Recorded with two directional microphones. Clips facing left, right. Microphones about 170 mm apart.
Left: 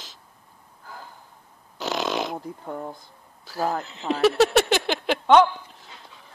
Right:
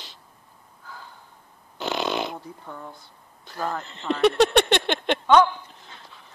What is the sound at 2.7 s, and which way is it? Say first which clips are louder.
Speech: left 7 dB; 35° left (ahead or behind).